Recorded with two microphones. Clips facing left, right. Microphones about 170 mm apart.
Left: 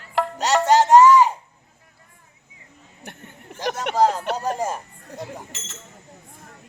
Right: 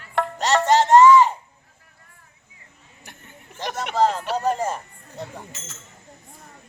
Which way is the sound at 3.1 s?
55° left (ahead or behind).